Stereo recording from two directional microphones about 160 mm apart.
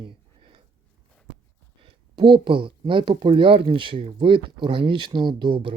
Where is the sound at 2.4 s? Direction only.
30° right (ahead or behind).